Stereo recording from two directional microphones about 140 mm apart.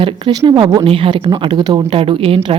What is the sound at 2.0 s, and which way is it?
Speech, 40° right (ahead or behind).